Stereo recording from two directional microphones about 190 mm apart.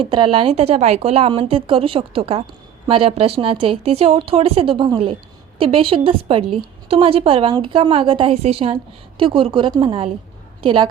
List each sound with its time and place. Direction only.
0.0 s a woman's voice: 25° right (ahead or behind)